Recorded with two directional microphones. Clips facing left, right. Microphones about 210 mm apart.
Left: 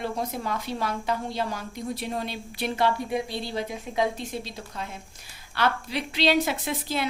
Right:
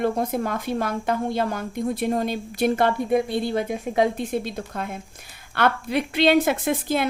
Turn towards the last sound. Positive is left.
turn(degrees=-50)  # may be behind; listen again after turning